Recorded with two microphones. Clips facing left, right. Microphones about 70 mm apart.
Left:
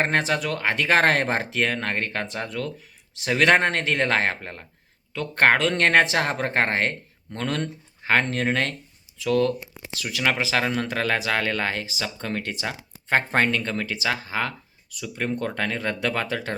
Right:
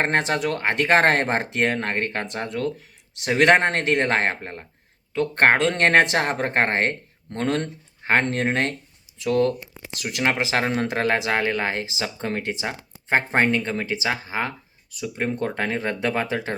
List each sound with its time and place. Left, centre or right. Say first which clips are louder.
0.2 s speech: right 1 dB; right
10.5 s speech: right 1 dB; right